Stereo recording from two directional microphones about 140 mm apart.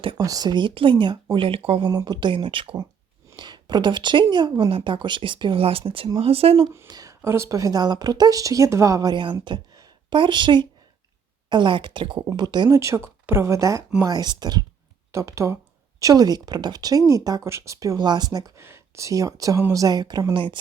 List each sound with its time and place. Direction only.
0.2 s a woman's voice: 25° right (ahead or behind)
1.9 s a woman's voice: 30° right (ahead or behind)
6.8 s a sound: 25° right (ahead or behind)
7.2 s a woman's voice: 20° right (ahead or behind); by 20.6 s 35° right (ahead or behind)